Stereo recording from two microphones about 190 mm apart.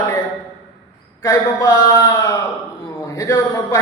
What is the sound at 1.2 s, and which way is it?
A man's voice, 15° left (ahead or behind).